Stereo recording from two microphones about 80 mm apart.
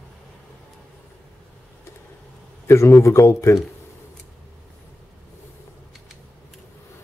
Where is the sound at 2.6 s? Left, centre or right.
Left.